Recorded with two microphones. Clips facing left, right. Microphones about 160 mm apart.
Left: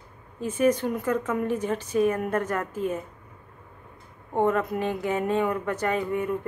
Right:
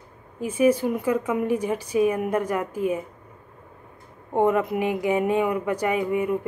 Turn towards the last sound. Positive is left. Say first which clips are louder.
# right 3 dB
turn(degrees=-10)  # may be behind; listen again after turning